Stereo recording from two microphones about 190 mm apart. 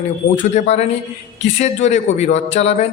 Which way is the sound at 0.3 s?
35° left (ahead or behind).